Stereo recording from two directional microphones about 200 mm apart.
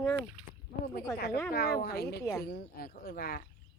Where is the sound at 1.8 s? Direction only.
50° left (ahead or behind).